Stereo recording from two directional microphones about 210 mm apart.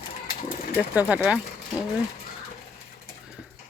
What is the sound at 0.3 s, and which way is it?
Pigeon, 40° left (ahead or behind).